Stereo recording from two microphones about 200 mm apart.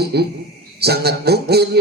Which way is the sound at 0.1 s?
55° right (ahead or behind).